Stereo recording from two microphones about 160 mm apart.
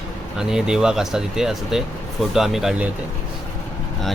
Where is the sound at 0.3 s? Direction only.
5° right (ahead or behind).